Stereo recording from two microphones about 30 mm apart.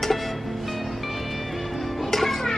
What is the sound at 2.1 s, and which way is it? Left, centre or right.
Music, centre.